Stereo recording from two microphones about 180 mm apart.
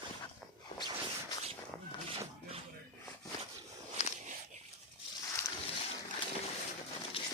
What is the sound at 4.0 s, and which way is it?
Walk, 40° left (ahead or behind).